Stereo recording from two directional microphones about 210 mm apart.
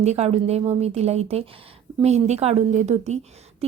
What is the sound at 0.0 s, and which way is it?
A woman's voice, 30° right (ahead or behind).